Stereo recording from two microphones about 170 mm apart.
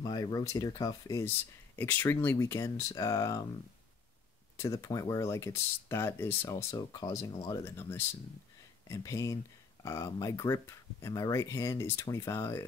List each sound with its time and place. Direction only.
0.0 s speech: 25° left (ahead or behind)
4.7 s speech: 20° left (ahead or behind)
7.6 s speech: 15° left (ahead or behind)